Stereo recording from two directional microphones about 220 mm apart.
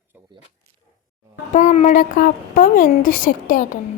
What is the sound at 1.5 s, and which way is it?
A woman's voice, 35° left (ahead or behind).